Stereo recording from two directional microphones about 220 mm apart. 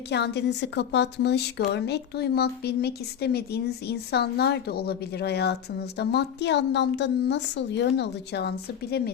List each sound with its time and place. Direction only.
0.1 s a woman's voice: 50° left (ahead or behind)